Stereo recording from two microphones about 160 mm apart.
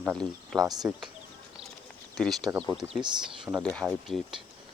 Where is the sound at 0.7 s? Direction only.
25° right (ahead or behind).